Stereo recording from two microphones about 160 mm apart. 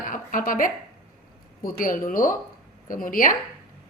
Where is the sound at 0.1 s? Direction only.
55° left (ahead or behind).